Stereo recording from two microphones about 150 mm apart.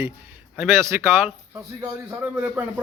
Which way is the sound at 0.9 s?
15° right (ahead or behind).